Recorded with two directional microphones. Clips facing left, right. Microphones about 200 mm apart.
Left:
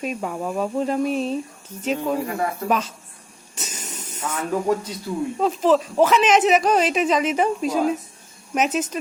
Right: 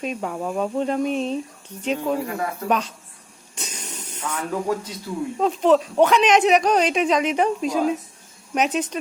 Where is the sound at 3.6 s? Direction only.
5° left (ahead or behind).